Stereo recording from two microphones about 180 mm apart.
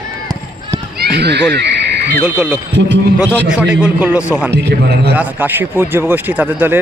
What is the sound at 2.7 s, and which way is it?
Speech, 75° right (ahead or behind).